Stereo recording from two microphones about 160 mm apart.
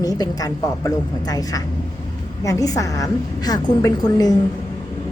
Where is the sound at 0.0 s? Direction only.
25° left (ahead or behind).